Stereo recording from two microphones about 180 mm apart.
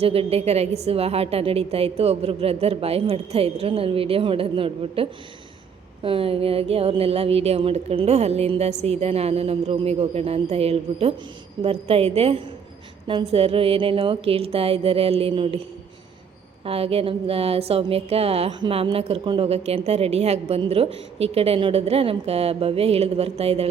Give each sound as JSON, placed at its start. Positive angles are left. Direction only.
{"t": 0.0, "sound": "speech", "side_deg": -35}
{"t": 16.6, "sound": "speech", "side_deg": -30}